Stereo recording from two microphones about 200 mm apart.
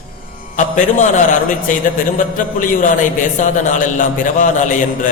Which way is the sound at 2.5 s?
40° left (ahead or behind).